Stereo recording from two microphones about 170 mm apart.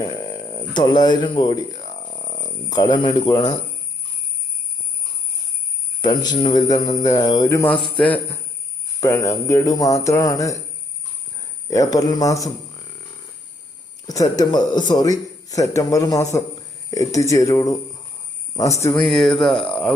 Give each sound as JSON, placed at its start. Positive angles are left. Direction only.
{"t": 0.0, "sound": "a man's voice", "side_deg": 25}
{"t": 6.0, "sound": "a man's voice", "side_deg": 25}
{"t": 11.7, "sound": "a man's voice", "side_deg": 20}
{"t": 14.3, "sound": "a man's voice", "side_deg": 25}
{"t": 18.9, "sound": "speech", "side_deg": 0}